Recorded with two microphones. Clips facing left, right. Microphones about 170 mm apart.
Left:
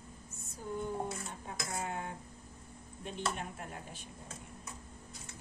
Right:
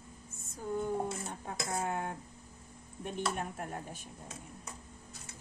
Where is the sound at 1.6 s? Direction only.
50° right (ahead or behind).